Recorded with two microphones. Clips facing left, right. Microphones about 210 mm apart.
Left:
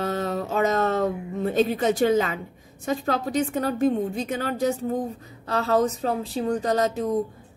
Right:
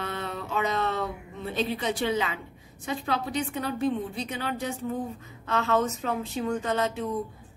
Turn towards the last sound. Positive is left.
turn(degrees=40)  # may be behind; listen again after turning